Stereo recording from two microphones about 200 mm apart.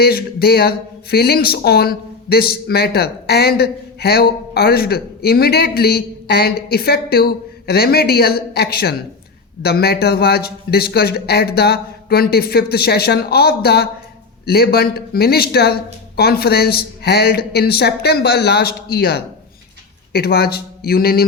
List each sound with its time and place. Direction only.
0.0 s speech: 50° left (ahead or behind)